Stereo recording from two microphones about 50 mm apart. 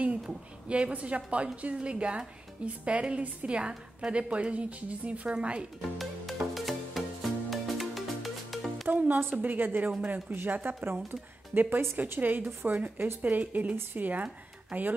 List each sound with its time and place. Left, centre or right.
0.3 s a woman's voice: right
5.8 s music: centre
8.8 s music: right
9.3 s a woman's voice: right
12.2 s a woman's voice: right